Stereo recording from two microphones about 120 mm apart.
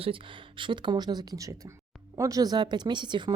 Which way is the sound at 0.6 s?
40° right (ahead or behind).